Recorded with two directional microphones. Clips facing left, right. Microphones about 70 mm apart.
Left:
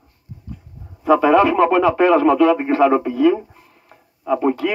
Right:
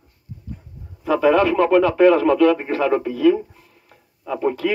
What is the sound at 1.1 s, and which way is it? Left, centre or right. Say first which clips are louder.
A man's voice: left 3 dB; centre.